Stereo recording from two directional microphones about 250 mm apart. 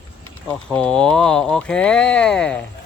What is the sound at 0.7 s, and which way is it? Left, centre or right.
A woman's voice, centre.